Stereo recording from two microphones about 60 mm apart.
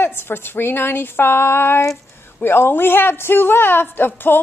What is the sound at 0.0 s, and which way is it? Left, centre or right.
Speech, left.